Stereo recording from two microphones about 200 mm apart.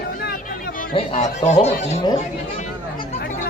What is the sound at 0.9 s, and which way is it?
Speech, 35° left (ahead or behind).